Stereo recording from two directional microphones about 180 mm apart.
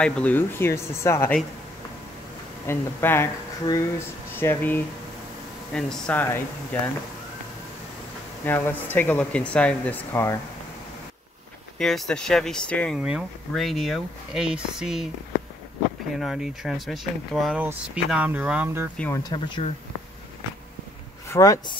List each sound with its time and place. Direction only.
0.0 s speech: 5° left (ahead or behind)
2.6 s speech: 15° left (ahead or behind)
8.5 s speech: 10° left (ahead or behind)
11.8 s speech: centre (ahead or behind)
16.2 s speech: centre (ahead or behind)
18.9 s speech: 15° left (ahead or behind)
21.3 s speech: 20° left (ahead or behind)